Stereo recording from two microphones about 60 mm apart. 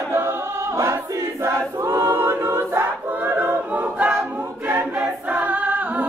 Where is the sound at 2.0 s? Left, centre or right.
Right.